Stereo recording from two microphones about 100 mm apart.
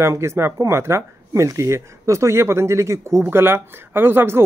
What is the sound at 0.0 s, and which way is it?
Speech, 30° right (ahead or behind).